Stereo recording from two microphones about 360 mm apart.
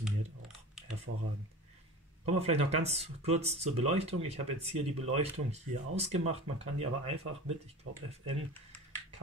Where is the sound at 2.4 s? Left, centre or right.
Centre.